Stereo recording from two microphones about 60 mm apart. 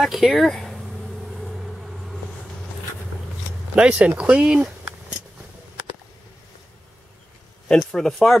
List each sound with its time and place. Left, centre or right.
0.0 s speech: centre
1.4 s vehicle: centre
3.7 s speech: centre
7.8 s speech: centre